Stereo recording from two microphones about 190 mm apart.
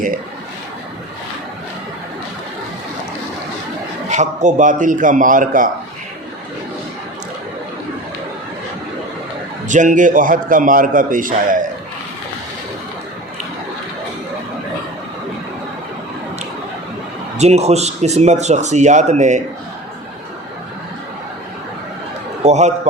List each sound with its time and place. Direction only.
4.1 s a man's voice: 40° right (ahead or behind)
9.6 s a man's voice: 40° right (ahead or behind)
17.3 s speech: 35° right (ahead or behind)
22.4 s speech: 35° right (ahead or behind)